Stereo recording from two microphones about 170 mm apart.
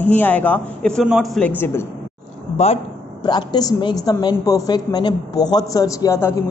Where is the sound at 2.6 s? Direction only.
40° left (ahead or behind).